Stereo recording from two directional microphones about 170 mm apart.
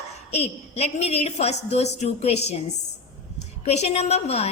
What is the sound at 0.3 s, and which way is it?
A woman's voice, 35° left (ahead or behind).